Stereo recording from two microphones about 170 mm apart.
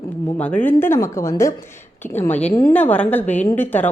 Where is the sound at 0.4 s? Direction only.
10° left (ahead or behind).